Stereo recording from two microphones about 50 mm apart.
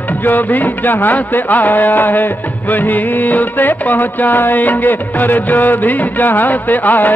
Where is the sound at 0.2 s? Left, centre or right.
Left.